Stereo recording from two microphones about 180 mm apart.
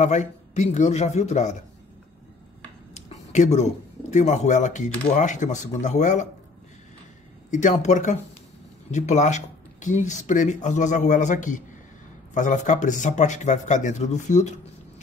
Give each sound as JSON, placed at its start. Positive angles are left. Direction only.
{"t": 0.0, "sound": "speech", "side_deg": 40}
{"t": 2.9, "sound": "a sound", "side_deg": 40}
{"t": 4.1, "sound": "speech", "side_deg": 40}
{"t": 7.5, "sound": "speech", "side_deg": 40}